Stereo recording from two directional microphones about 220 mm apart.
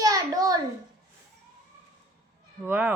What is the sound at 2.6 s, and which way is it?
Speech, 10° right (ahead or behind).